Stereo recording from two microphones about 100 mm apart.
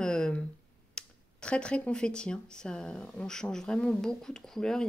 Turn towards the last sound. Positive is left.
turn(degrees=5)  # may be behind; listen again after turning